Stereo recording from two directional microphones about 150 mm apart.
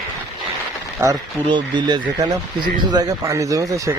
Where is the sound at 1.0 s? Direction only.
20° right (ahead or behind).